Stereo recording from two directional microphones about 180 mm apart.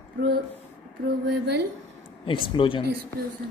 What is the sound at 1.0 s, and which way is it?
Speech, 60° right (ahead or behind).